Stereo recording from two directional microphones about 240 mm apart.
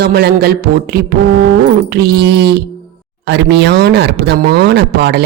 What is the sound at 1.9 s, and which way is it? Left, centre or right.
Speech, right.